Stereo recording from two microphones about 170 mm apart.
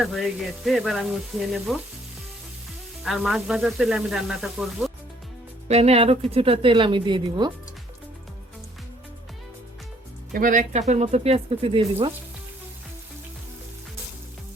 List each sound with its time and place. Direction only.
0.0 s speech: centre (ahead or behind)
3.0 s speech: centre (ahead or behind)
5.6 s a woman's voice: 40° right (ahead or behind)
10.3 s a woman's voice: 50° right (ahead or behind); by 12.1 s 30° right (ahead or behind)